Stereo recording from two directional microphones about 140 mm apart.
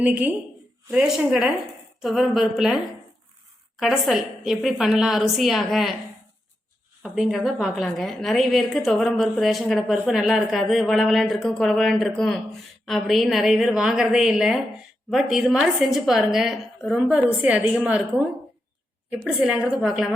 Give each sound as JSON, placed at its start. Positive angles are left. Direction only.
{"t": 0.0, "sound": "a woman's voice", "side_deg": -10}
{"t": 7.0, "sound": "a woman's voice", "side_deg": 0}
{"t": 17.1, "sound": "a woman's voice", "side_deg": -10}
{"t": 19.1, "sound": "a woman's voice", "side_deg": -5}